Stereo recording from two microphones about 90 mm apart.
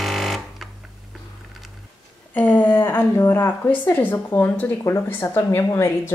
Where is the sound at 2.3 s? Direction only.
20° left (ahead or behind).